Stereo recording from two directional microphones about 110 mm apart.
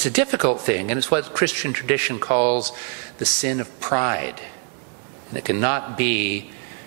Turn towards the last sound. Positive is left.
turn(degrees=-15)  # may be behind; listen again after turning